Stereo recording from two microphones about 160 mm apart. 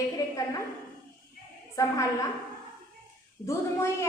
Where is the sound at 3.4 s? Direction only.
15° left (ahead or behind).